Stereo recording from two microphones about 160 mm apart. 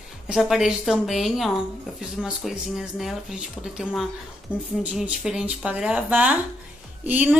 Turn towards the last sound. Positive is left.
turn(degrees=-10)  # may be behind; listen again after turning